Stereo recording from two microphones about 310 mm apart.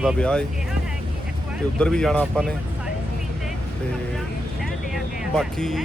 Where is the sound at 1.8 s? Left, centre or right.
Centre.